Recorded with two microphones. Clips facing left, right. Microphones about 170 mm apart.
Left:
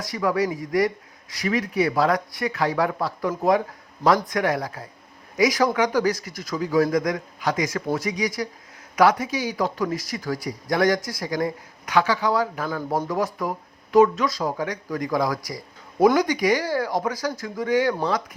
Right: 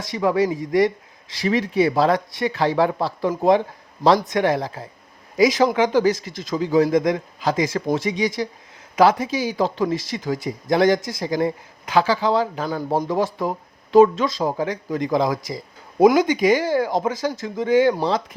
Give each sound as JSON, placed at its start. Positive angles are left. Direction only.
{"t": 0.0, "sound": "speech", "side_deg": -25}